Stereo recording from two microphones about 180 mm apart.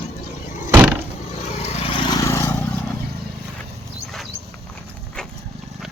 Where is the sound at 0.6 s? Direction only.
10° right (ahead or behind).